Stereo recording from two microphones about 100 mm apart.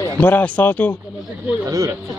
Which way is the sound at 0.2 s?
15° left (ahead or behind).